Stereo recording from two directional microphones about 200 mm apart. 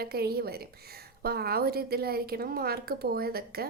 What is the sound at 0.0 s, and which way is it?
A woman's voice, 50° right (ahead or behind).